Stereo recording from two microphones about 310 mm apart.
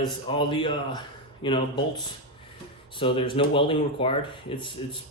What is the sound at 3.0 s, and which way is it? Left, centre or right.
Speech, centre.